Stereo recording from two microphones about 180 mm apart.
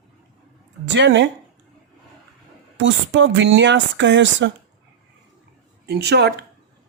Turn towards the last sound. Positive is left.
turn(degrees=-70)  # may be behind; listen again after turning